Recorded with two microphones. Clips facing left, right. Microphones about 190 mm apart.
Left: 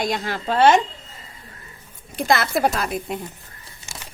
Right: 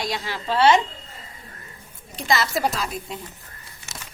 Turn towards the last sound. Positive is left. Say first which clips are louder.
# left 4 dB
turn(degrees=55)  # may be behind; listen again after turning